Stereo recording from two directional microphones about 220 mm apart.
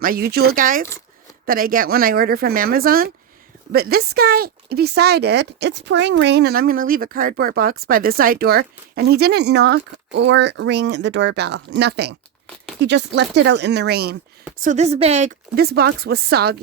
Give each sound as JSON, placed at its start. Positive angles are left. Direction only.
{"t": 0.0, "sound": "speech", "side_deg": -45}
{"t": 14.6, "sound": "a woman's voice", "side_deg": -30}
{"t": 15.5, "sound": "speech", "side_deg": -45}